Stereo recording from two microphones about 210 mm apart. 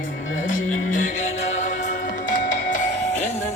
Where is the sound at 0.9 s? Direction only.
35° left (ahead or behind).